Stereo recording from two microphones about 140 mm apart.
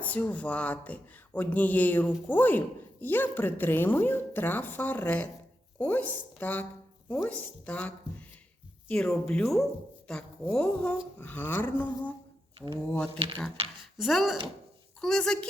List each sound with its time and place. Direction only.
0.0 s a woman's voice: 10° left (ahead or behind)
12.5 s speech: 35° right (ahead or behind)
14.0 s a woman's voice: centre (ahead or behind)